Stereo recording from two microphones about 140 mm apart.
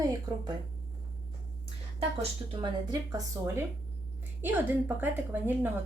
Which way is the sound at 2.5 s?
35° right (ahead or behind).